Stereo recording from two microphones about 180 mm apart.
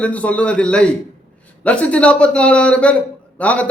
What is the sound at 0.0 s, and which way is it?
A man's voice, 5° left (ahead or behind).